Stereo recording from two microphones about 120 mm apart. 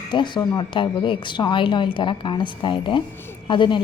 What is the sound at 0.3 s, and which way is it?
A woman's voice, 40° left (ahead or behind).